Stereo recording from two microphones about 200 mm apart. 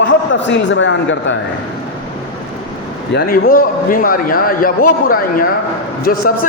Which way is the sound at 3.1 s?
50° left (ahead or behind).